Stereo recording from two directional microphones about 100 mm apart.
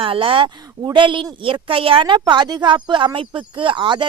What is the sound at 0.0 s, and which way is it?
Speech, 60° right (ahead or behind).